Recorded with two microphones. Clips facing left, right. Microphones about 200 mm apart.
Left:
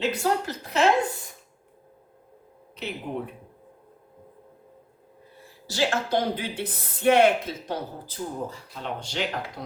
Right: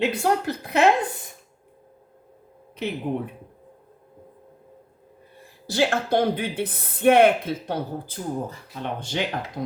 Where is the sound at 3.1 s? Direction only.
40° right (ahead or behind).